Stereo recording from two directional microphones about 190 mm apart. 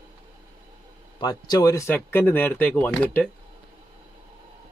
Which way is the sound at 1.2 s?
20° left (ahead or behind).